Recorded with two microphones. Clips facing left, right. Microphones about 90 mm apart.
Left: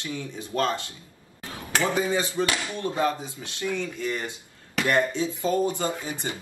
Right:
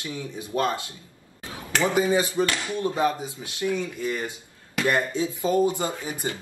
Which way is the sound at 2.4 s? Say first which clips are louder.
Even; 15° left (ahead or behind).